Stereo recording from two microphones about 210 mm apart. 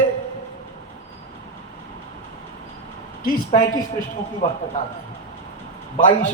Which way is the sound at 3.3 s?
40° left (ahead or behind).